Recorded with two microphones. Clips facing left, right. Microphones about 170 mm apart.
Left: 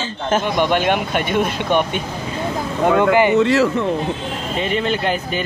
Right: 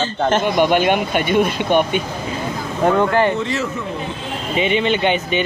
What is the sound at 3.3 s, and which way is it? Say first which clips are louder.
Speech: left 7 dB; 70° left (ahead or behind).